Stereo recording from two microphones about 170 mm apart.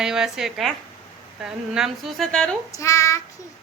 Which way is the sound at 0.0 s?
5° right (ahead or behind).